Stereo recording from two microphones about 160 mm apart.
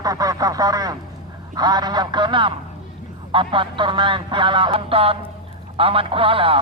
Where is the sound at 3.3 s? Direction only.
30° right (ahead or behind).